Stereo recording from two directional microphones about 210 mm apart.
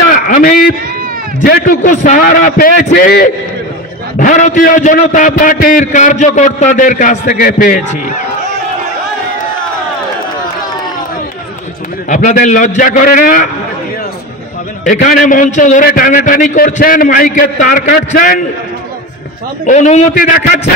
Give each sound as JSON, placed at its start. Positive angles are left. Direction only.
{"t": 0.3, "sound": "a man's voice", "side_deg": 45}
{"t": 12.1, "sound": "a man's voice", "side_deg": 35}
{"t": 14.9, "sound": "a man's voice", "side_deg": 40}
{"t": 19.6, "sound": "a man's voice", "side_deg": 35}